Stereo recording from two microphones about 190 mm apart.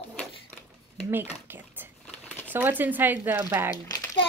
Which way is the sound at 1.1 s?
10° right (ahead or behind).